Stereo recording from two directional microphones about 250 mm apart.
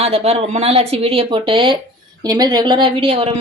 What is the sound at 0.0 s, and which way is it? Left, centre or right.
A woman's voice, right.